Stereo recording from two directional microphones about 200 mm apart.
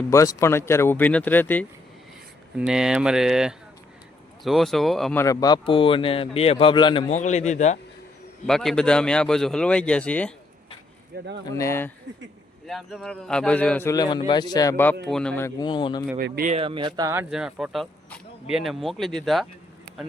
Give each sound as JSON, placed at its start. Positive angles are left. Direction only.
{"t": 0.1, "sound": "a man's voice", "side_deg": 15}
{"t": 2.6, "sound": "speech", "side_deg": -5}
{"t": 5.2, "sound": "speech", "side_deg": 15}
{"t": 7.1, "sound": "speech", "side_deg": 35}
{"t": 8.4, "sound": "speech", "side_deg": 0}
{"t": 11.4, "sound": "a man's voice", "side_deg": 15}
{"t": 12.1, "sound": "speech", "side_deg": -65}
{"t": 12.6, "sound": "a man's voice", "side_deg": 0}
{"t": 16.1, "sound": "speech", "side_deg": -50}
{"t": 16.5, "sound": "speech", "side_deg": -25}
{"t": 17.2, "sound": "speech", "side_deg": -5}